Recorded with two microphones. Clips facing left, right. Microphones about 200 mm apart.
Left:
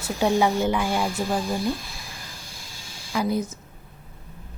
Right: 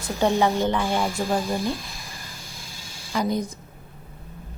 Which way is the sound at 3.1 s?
5° left (ahead or behind).